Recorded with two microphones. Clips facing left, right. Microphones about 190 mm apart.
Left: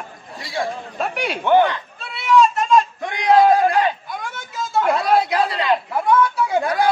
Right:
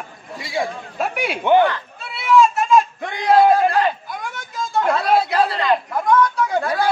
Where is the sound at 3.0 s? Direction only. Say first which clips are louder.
Left 1 dB; 15° left (ahead or behind).